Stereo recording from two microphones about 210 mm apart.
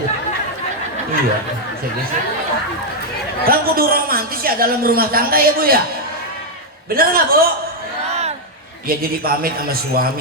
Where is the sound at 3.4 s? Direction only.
45° right (ahead or behind).